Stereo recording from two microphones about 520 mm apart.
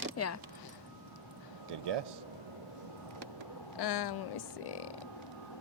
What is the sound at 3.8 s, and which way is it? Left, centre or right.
Speech, left.